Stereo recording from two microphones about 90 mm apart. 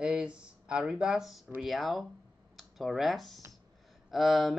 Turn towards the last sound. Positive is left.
turn(degrees=0)  # may be behind; listen again after turning